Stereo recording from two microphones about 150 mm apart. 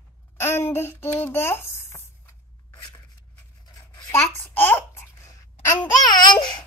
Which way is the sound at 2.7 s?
30° left (ahead or behind).